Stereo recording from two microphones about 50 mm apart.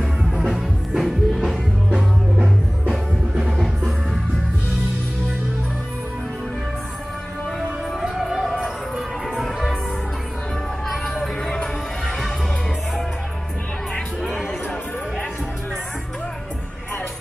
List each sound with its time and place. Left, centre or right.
0.4 s music: centre
1.9 s music: centre
3.4 s music: centre
8.0 s music: centre
9.4 s music: centre
11.1 s music: centre